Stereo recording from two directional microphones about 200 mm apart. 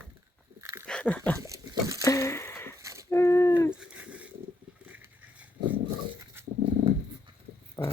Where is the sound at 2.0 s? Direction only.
15° left (ahead or behind).